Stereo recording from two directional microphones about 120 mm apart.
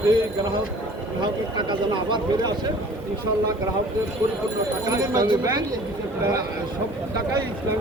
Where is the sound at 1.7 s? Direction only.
40° right (ahead or behind).